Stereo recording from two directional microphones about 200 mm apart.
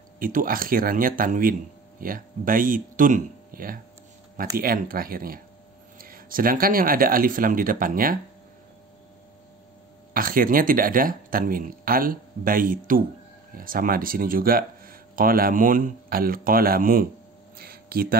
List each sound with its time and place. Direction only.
0.2 s speech: 45° right (ahead or behind)
10.1 s speech: 45° right (ahead or behind)
17.6 s a sound: 50° right (ahead or behind)